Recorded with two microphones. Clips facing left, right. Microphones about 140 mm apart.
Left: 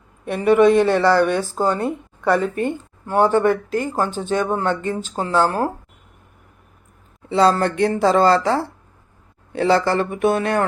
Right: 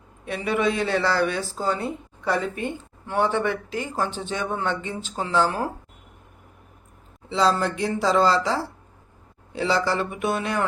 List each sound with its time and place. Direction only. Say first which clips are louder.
0.3 s speech: left 10 dB; 55° left (ahead or behind)
7.3 s speech: left 5 dB; 55° left (ahead or behind)